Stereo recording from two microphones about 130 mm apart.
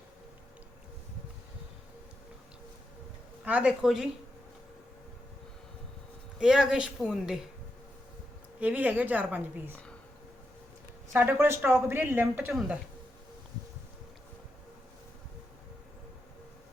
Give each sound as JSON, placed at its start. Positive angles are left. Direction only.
{"t": 3.4, "sound": "a woman's voice", "side_deg": -10}
{"t": 6.4, "sound": "a woman's voice", "side_deg": -5}
{"t": 8.6, "sound": "a woman's voice", "side_deg": -10}
{"t": 11.1, "sound": "a woman's voice", "side_deg": -20}